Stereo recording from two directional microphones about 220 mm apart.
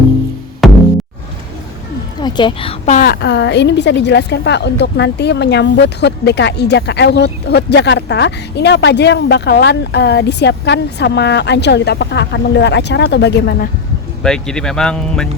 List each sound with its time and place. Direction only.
0.6 s music: centre (ahead or behind)
2.2 s a woman's voice: 20° left (ahead or behind); by 13.7 s 45° left (ahead or behind)
14.2 s speech: 5° left (ahead or behind)